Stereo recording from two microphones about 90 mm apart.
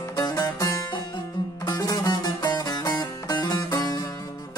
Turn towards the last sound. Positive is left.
turn(degrees=40)  # may be behind; listen again after turning